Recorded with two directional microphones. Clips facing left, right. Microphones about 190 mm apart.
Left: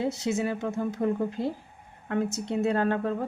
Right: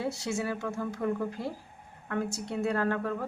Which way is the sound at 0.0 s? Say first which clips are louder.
Left 4 dB; 20° left (ahead or behind).